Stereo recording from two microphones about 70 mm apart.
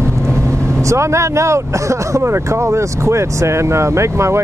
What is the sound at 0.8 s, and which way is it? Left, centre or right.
Speech, right.